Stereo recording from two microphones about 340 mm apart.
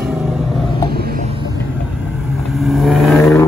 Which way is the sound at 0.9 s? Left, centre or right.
Right.